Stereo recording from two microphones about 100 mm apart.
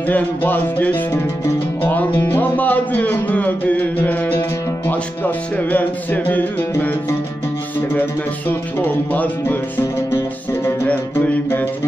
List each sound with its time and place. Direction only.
0.0 s music: 15° left (ahead or behind)
1.8 s speech: 20° left (ahead or behind)
9.1 s music: 15° left (ahead or behind)
10.9 s music: 15° left (ahead or behind)